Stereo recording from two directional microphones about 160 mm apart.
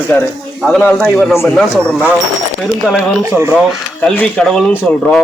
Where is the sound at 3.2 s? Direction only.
15° right (ahead or behind).